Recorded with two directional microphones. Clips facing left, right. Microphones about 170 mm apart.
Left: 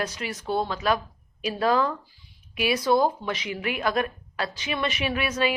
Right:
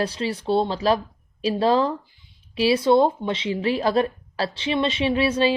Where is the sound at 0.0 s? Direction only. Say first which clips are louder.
Right 6 dB; 30° right (ahead or behind).